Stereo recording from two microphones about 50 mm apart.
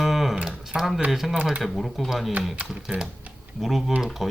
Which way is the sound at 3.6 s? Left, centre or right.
Centre.